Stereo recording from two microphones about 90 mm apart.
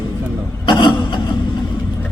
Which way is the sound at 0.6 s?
55° left (ahead or behind).